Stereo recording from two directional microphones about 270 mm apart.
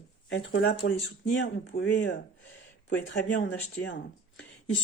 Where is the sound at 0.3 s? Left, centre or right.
Left.